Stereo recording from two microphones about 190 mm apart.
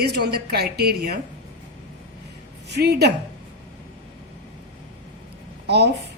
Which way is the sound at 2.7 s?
60° right (ahead or behind).